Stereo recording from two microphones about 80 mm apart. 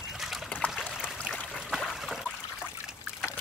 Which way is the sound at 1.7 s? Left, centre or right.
Centre.